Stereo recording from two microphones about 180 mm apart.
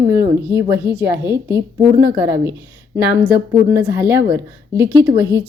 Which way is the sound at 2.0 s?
15° right (ahead or behind).